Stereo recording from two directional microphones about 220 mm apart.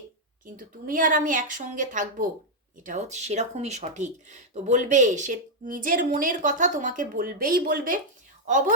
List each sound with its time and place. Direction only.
0.4 s speech: 40° right (ahead or behind)